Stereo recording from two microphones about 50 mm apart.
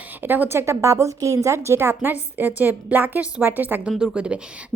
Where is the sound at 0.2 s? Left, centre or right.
Right.